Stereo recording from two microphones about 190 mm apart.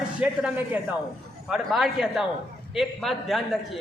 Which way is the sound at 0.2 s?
5° right (ahead or behind).